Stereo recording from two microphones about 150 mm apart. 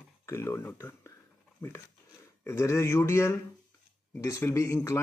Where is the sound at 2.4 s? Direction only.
15° left (ahead or behind).